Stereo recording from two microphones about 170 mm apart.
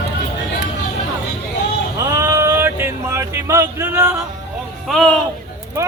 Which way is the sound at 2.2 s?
15° right (ahead or behind).